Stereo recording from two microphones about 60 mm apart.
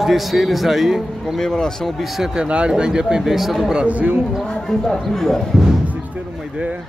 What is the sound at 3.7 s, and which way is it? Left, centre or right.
Speech, right.